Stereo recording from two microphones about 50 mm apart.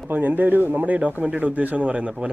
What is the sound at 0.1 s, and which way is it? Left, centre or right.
Speech, right.